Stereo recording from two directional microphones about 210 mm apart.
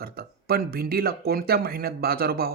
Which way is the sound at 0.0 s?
45° right (ahead or behind).